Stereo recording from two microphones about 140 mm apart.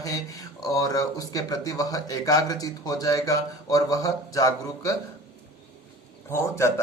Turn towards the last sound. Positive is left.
turn(degrees=20)  # may be behind; listen again after turning